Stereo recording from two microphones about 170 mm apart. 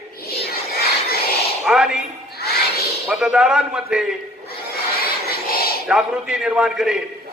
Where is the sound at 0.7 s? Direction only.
65° left (ahead or behind).